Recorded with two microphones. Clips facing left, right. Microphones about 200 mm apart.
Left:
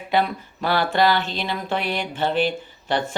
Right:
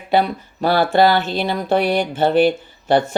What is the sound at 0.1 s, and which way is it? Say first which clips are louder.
Speech: right 4 dB; 35° right (ahead or behind).